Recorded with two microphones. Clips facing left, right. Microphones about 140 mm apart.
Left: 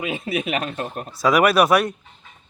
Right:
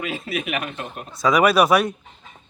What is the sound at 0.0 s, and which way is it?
Speech, 20° left (ahead or behind).